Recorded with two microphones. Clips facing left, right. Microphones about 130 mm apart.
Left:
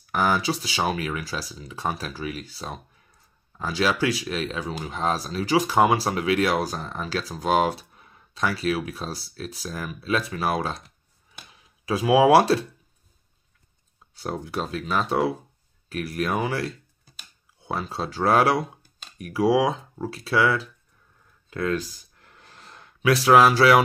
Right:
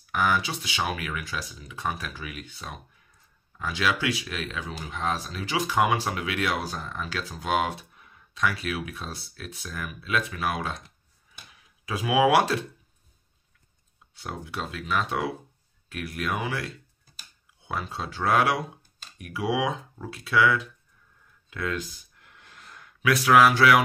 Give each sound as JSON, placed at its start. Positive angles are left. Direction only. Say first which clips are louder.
{"t": 0.1, "sound": "speech", "louder": "left 3 dB", "side_deg": 35}
{"t": 14.1, "sound": "speech", "louder": "left 6 dB", "side_deg": 35}
{"t": 21.5, "sound": "a sound", "louder": "left 5 dB", "side_deg": 35}